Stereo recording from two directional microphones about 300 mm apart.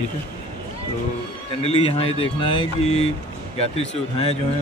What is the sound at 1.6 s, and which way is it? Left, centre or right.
Speech, centre.